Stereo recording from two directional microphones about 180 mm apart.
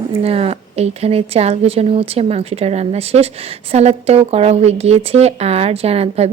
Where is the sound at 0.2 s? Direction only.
35° right (ahead or behind).